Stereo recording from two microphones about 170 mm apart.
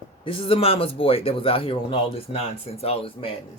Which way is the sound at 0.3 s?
35° left (ahead or behind).